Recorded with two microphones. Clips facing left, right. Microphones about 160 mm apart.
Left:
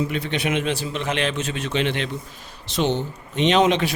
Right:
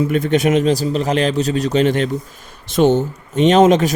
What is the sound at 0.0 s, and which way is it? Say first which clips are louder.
A man's voice: right 9 dB; 45° right (ahead or behind).